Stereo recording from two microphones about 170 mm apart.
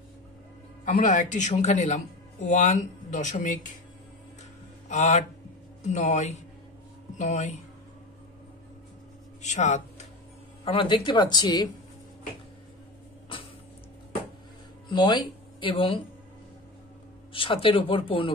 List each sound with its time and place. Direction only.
0.8 s speech: 50° left (ahead or behind)
4.8 s speech: 45° left (ahead or behind)
9.4 s speech: 45° left (ahead or behind)
10.6 s speech: 30° left (ahead or behind)
14.9 s speech: 25° left (ahead or behind)
17.3 s speech: 30° left (ahead or behind)